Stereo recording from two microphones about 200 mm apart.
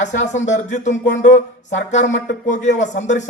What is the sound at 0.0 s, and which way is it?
Speech, 35° left (ahead or behind).